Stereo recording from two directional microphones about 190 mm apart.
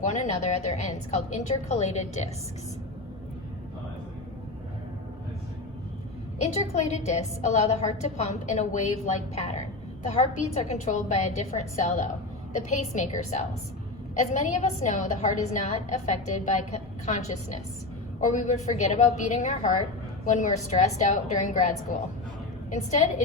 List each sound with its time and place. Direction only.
0.0 s a woman's voice: 40° left (ahead or behind)
6.4 s a woman's voice: 35° left (ahead or behind)